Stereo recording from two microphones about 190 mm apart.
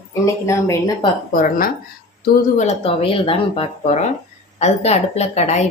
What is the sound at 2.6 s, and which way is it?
A woman's voice, 35° left (ahead or behind).